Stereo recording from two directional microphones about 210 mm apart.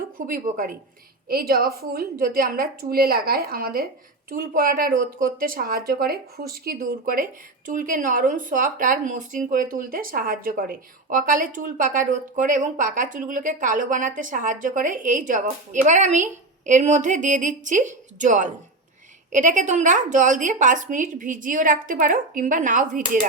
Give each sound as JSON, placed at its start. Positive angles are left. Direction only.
{"t": 0.3, "sound": "a woman's voice", "side_deg": -40}